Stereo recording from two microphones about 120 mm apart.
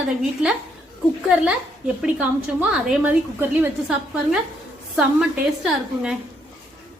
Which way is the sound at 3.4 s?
15° right (ahead or behind).